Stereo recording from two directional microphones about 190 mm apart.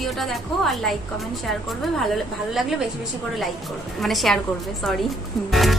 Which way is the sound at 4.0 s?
Centre (ahead or behind).